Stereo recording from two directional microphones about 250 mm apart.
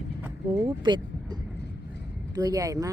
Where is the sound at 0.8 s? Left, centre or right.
Centre.